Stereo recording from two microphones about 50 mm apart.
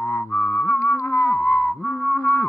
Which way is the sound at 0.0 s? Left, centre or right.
Left.